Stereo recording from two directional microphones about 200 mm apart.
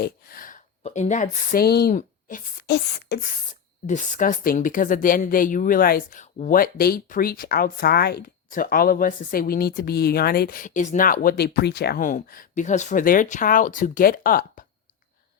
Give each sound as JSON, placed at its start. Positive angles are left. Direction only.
{"t": 0.0, "sound": "speech", "side_deg": 45}
{"t": 3.8, "sound": "a woman's voice", "side_deg": 40}